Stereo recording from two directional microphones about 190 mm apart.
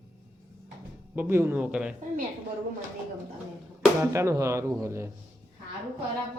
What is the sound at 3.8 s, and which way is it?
Speech, 15° right (ahead or behind).